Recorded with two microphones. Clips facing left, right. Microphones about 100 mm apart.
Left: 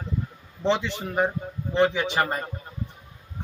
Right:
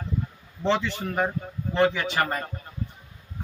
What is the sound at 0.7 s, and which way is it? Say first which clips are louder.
A man's voice: even; 20° left (ahead or behind).